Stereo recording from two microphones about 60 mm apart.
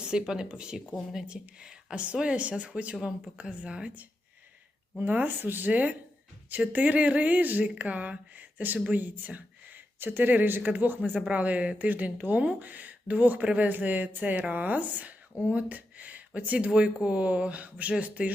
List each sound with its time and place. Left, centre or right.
0.0 s speech: centre
4.9 s speech: right